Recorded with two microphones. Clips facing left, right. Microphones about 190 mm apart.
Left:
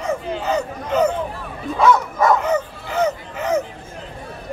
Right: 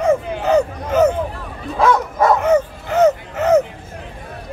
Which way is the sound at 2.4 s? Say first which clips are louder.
Right 6 dB; 50° right (ahead or behind).